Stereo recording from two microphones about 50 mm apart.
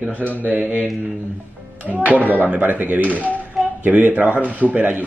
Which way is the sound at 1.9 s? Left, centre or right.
Right.